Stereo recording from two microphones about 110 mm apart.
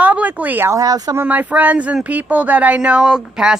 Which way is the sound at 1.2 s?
15° right (ahead or behind).